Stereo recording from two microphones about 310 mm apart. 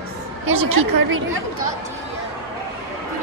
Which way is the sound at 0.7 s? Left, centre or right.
Right.